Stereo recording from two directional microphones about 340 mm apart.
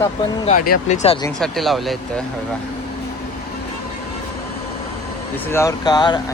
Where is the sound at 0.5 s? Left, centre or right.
Left.